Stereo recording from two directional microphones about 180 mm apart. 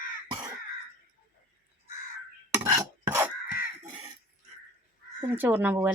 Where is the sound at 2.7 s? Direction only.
20° right (ahead or behind).